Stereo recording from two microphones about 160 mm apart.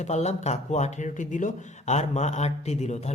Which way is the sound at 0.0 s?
45° left (ahead or behind).